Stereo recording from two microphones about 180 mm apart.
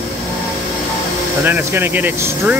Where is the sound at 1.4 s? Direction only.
10° right (ahead or behind).